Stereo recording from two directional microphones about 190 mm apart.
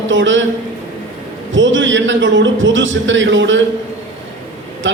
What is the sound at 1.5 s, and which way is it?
A man's voice, 75° right (ahead or behind).